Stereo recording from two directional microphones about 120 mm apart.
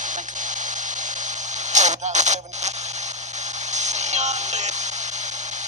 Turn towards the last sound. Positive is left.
turn(degrees=-75)  # may be behind; listen again after turning